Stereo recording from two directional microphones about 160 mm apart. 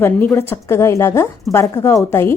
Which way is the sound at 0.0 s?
15° left (ahead or behind).